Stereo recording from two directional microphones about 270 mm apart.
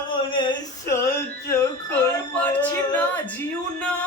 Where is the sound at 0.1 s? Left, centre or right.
Centre.